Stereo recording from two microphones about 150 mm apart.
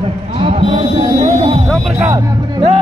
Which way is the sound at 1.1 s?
35° right (ahead or behind).